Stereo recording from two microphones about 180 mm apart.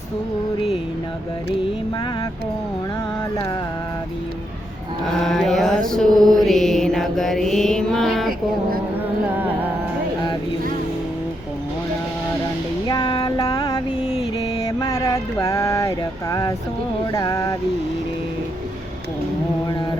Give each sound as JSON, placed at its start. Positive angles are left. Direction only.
{"t": 5.2, "sound": "mantra", "side_deg": 0}
{"t": 12.9, "sound": "music", "side_deg": 25}
{"t": 14.7, "sound": "a sound", "side_deg": 20}